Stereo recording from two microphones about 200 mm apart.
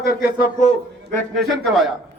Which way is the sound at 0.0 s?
50° left (ahead or behind).